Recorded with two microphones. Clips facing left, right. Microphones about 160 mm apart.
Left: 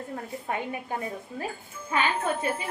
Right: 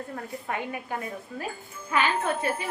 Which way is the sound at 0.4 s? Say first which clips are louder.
Left 1 dB; 30° left (ahead or behind).